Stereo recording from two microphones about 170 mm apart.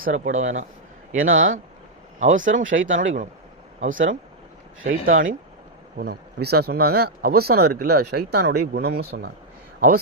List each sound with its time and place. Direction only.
0.0 s speech: 45° right (ahead or behind)
2.9 s speech: 90° right
3.8 s speech: 50° right (ahead or behind)
5.0 s speech: 55° right (ahead or behind)
6.0 s speech: 65° right (ahead or behind)